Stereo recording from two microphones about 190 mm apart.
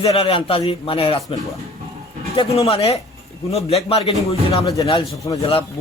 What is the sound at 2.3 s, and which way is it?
A man's voice, 30° left (ahead or behind).